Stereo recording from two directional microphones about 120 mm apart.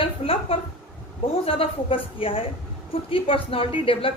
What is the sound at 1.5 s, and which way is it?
A woman's voice, 50° left (ahead or behind).